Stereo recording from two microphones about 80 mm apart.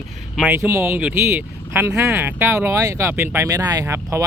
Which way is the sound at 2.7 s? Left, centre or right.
Right.